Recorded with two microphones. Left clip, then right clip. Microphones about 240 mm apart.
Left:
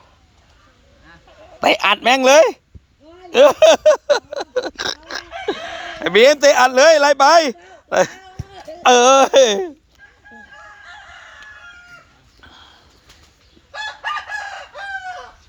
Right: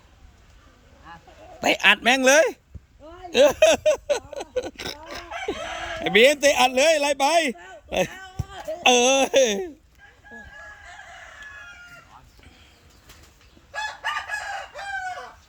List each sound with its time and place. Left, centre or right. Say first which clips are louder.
1.5 s speech: left 4 dB; centre
4.9 s chicken: left 7 dB; centre
6.1 s speech: left 6 dB; centre
7.9 s speech: left 9 dB; left
8.1 s a sound: even; centre
8.9 s speech: left 8 dB; centre